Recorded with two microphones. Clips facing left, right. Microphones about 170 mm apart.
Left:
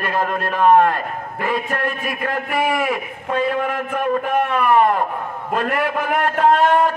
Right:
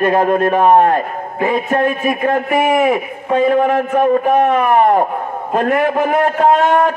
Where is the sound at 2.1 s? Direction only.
50° right (ahead or behind).